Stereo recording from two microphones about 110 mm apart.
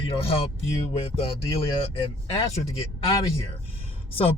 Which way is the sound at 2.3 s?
65° left (ahead or behind).